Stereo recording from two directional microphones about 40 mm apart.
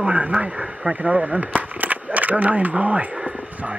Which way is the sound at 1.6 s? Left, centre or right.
Right.